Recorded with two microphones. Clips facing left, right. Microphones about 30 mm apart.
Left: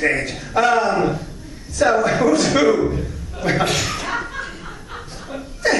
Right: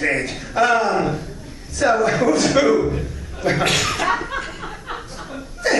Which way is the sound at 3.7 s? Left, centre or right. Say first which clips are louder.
Right 2 dB; right.